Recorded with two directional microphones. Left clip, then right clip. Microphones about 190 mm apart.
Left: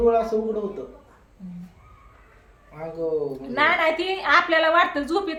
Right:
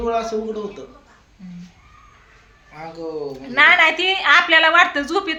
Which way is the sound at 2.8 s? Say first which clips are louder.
Even; 15° left (ahead or behind).